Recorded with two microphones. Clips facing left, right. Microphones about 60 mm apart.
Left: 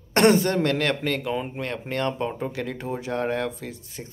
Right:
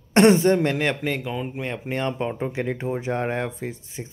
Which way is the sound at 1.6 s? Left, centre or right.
Centre.